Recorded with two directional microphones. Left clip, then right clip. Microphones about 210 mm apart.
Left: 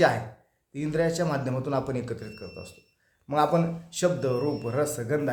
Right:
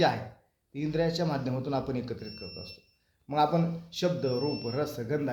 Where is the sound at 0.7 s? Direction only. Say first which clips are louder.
Left 3 dB; 15° left (ahead or behind).